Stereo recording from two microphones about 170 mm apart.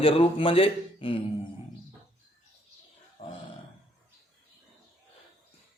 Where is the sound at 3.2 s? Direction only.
40° left (ahead or behind).